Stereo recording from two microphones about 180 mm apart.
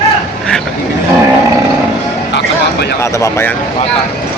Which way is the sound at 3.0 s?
15° left (ahead or behind).